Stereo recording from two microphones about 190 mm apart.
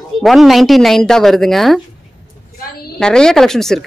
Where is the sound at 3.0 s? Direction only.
5° left (ahead or behind).